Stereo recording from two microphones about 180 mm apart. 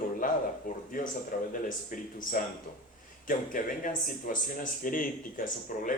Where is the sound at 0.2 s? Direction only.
50° left (ahead or behind).